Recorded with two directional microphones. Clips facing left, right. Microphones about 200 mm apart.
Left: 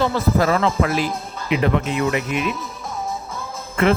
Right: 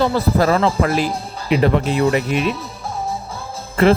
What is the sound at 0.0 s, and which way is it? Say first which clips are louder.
Speech: right 2 dB; 35° right (ahead or behind).